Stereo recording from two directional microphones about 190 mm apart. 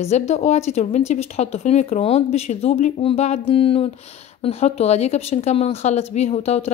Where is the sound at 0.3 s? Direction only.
35° left (ahead or behind).